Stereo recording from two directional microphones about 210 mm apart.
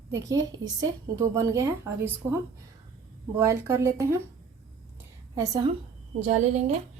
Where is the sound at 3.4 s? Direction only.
10° right (ahead or behind).